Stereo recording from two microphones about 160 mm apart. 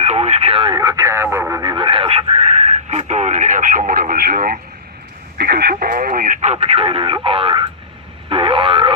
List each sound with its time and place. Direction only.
0.0 s speech: 45° right (ahead or behind); by 1.7 s 15° right (ahead or behind)
1.7 s radio: 30° right (ahead or behind); by 4.6 s 60° right (ahead or behind)
5.4 s speech: 75° right (ahead or behind); by 7.7 s 35° right (ahead or behind)
8.3 s a sound: 35° right (ahead or behind)